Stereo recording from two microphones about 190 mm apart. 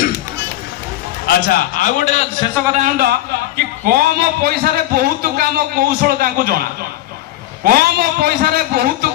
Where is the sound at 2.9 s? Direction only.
55° right (ahead or behind).